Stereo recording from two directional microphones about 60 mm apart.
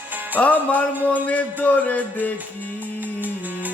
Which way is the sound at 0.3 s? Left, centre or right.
Left.